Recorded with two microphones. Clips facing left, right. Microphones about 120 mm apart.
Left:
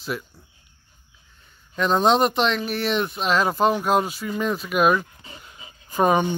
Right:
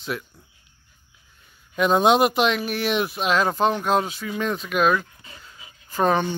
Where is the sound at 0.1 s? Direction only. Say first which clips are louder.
Left 1 dB; 5° left (ahead or behind).